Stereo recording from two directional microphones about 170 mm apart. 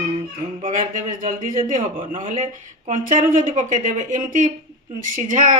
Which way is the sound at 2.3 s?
50° right (ahead or behind).